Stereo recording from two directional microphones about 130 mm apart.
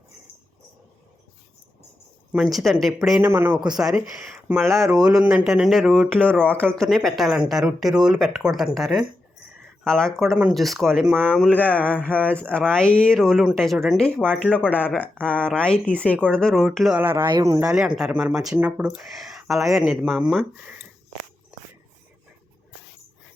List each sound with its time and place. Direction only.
2.3 s speech: centre (ahead or behind)
3.2 s speech: 15° right (ahead or behind)
3.8 s speech: 5° right (ahead or behind)
4.4 s speech: 10° right (ahead or behind)
6.1 s speech: 10° left (ahead or behind)
17.0 s speech: 15° right (ahead or behind)
17.2 s speech: 30° right (ahead or behind)
17.7 s speech: 5° right (ahead or behind)